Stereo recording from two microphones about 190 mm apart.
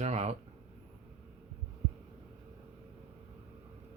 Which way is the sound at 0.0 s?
35° right (ahead or behind).